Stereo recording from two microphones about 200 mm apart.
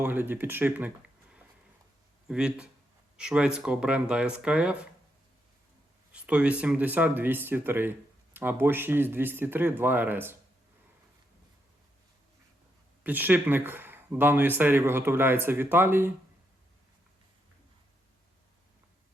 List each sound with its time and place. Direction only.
0.0 s speech: 10° right (ahead or behind)
6.2 s speech: 5° right (ahead or behind)
13.0 s speech: 10° right (ahead or behind)